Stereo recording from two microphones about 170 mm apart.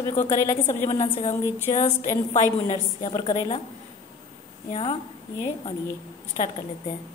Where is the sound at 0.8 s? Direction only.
40° left (ahead or behind).